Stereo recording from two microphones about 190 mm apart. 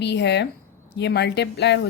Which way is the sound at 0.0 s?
65° left (ahead or behind).